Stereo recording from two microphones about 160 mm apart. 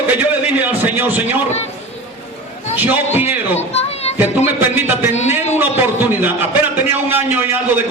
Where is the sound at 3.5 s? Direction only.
40° left (ahead or behind).